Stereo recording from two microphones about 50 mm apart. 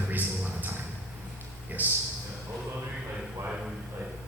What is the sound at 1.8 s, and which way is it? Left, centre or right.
Speech, right.